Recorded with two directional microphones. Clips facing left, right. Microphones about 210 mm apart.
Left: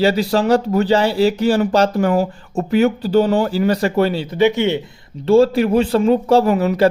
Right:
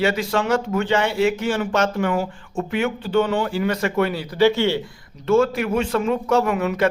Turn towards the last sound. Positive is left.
turn(degrees=35)  # may be behind; listen again after turning